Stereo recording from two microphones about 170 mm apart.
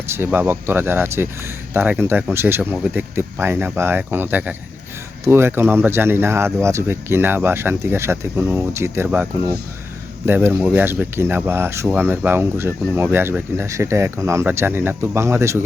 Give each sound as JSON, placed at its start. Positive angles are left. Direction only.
{"t": 0.1, "sound": "speech", "side_deg": -10}